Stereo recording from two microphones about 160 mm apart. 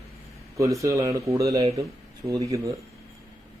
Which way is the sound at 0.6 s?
20° right (ahead or behind).